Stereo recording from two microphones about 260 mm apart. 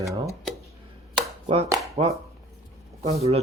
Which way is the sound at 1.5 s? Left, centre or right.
Right.